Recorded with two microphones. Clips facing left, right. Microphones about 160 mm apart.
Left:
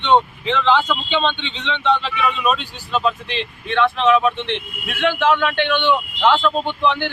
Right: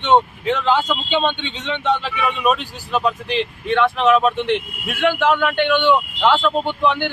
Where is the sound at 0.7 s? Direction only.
10° right (ahead or behind).